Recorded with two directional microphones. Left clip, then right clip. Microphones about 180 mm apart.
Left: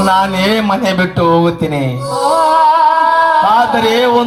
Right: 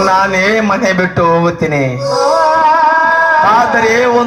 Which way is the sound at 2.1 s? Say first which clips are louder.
Even; 20° left (ahead or behind).